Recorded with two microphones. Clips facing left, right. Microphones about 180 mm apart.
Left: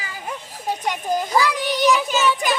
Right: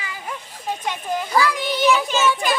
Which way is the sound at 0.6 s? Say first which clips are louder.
Left 2 dB; 40° left (ahead or behind).